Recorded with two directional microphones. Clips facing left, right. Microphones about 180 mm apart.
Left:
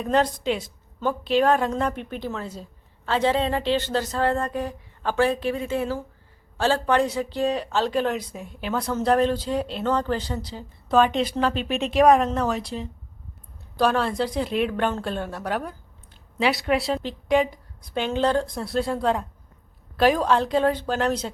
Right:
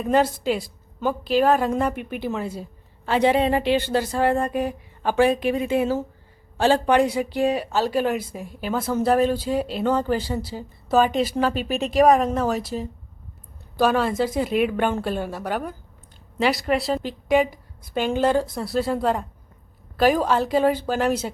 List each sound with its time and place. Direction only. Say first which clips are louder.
0.0 s a woman's voice: right 2 dB; 5° right (ahead or behind)